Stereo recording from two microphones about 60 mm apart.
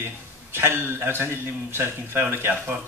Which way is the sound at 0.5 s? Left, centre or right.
Right.